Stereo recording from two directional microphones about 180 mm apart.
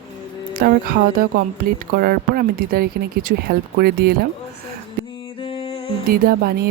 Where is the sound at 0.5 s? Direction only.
55° right (ahead or behind).